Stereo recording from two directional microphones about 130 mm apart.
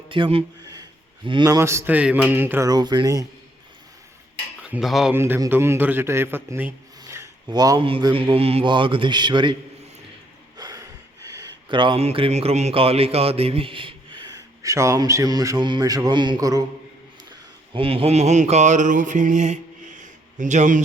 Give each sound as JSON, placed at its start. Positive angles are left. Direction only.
{"t": 0.1, "sound": "speech", "side_deg": -45}
{"t": 0.6, "sound": "a sound", "side_deg": -30}
{"t": 1.5, "sound": "a man's voice", "side_deg": -25}
{"t": 2.6, "sound": "a man's voice", "side_deg": -35}
{"t": 4.7, "sound": "speech", "side_deg": 0}
{"t": 5.1, "sound": "a man's voice", "side_deg": -15}
{"t": 7.0, "sound": "rub", "side_deg": -20}
{"t": 7.4, "sound": "speech", "side_deg": -30}
{"t": 7.9, "sound": "a man's voice", "side_deg": -45}
{"t": 10.6, "sound": "snort", "side_deg": -30}
{"t": 11.3, "sound": "speech", "side_deg": -40}
{"t": 17.7, "sound": "mantra", "side_deg": -45}